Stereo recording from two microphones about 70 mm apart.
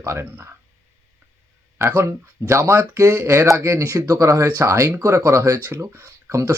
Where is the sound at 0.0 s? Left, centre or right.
Right.